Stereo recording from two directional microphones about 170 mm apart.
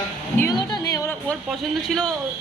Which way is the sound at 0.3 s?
20° left (ahead or behind).